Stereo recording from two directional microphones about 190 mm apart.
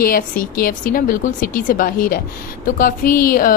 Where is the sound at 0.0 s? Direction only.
50° left (ahead or behind).